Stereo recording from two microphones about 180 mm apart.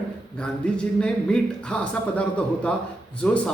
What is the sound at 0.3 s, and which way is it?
A man's voice, 5° left (ahead or behind).